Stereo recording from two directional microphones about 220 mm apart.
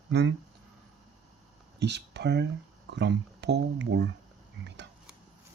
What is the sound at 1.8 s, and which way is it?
Speech, 50° right (ahead or behind).